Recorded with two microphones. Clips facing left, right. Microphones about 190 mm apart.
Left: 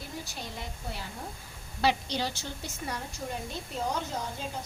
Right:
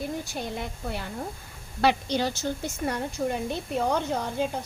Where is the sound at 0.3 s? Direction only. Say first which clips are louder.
Right 8 dB; 60° right (ahead or behind).